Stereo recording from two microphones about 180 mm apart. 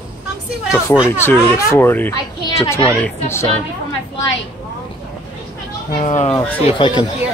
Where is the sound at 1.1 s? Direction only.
15° left (ahead or behind).